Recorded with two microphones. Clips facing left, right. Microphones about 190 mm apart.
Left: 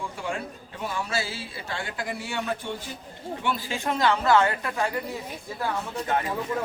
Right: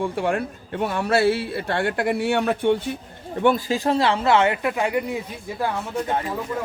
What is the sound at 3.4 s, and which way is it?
Speech, 50° right (ahead or behind).